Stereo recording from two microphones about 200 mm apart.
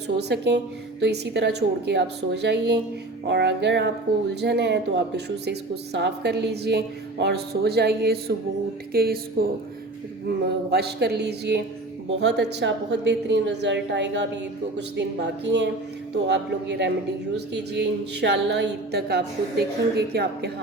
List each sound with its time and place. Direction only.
0.2 s speech: 55° right (ahead or behind)
8.9 s a sound: 50° right (ahead or behind)
10.7 s speech: 55° right (ahead or behind)